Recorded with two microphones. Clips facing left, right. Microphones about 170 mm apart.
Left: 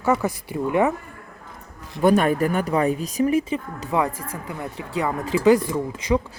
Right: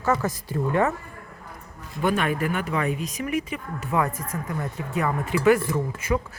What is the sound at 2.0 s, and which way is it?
Speech, 40° left (ahead or behind).